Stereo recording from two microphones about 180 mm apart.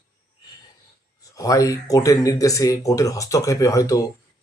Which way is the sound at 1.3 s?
20° left (ahead or behind).